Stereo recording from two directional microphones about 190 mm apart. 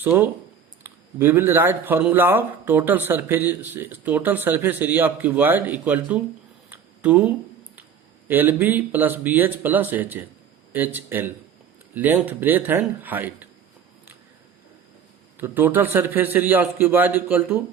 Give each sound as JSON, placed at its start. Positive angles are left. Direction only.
{"t": 0.0, "sound": "speech", "side_deg": -10}
{"t": 6.7, "sound": "a sound", "side_deg": -10}
{"t": 8.3, "sound": "speech", "side_deg": -10}
{"t": 15.4, "sound": "speech", "side_deg": -10}